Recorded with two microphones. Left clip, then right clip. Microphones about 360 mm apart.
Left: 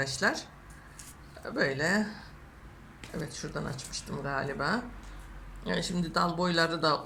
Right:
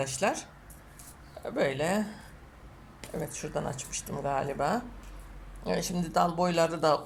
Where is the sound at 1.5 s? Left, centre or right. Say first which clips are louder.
Even; centre.